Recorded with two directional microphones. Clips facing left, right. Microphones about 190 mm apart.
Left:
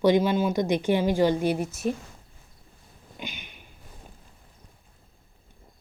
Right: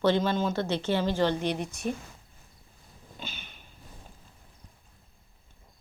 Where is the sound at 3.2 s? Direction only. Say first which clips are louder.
Left 4 dB; 15° left (ahead or behind).